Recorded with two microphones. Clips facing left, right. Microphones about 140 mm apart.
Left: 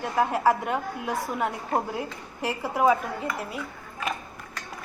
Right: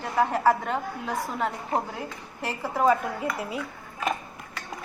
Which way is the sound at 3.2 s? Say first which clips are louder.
Right 2 dB; 5° right (ahead or behind).